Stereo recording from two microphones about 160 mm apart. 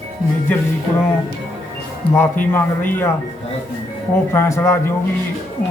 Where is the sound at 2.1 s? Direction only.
10° left (ahead or behind).